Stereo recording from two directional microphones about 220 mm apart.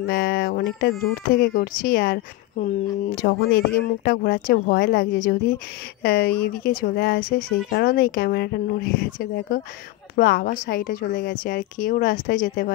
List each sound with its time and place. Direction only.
0.0 s a woman's voice: 45° left (ahead or behind)
3.2 s a woman's voice: 45° left (ahead or behind)